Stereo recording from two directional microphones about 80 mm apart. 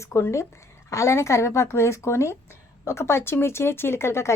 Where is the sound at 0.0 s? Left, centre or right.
Left.